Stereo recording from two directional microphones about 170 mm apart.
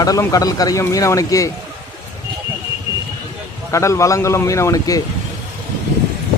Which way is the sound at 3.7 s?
15° left (ahead or behind).